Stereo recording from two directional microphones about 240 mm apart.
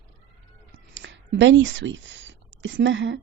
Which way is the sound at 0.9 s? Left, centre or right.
Right.